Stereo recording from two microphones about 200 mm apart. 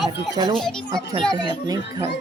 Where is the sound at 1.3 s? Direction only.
20° right (ahead or behind).